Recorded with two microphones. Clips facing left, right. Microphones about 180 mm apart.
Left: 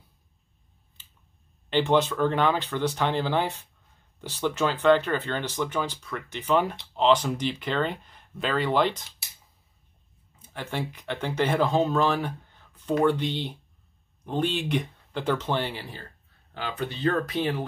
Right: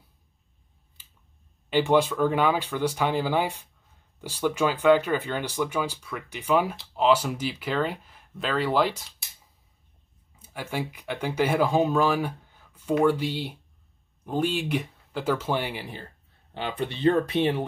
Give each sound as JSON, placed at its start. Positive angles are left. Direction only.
{"t": 1.0, "sound": "scissors", "side_deg": -10}
{"t": 1.7, "sound": "speech", "side_deg": -10}
{"t": 10.4, "sound": "speech", "side_deg": -10}
{"t": 16.5, "sound": "speech", "side_deg": -25}